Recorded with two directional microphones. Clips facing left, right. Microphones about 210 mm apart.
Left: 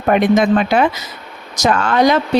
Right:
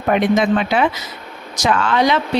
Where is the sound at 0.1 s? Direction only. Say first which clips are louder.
Left 3 dB; 45° left (ahead or behind).